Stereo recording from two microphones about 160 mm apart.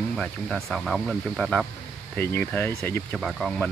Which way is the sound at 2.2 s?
15° left (ahead or behind).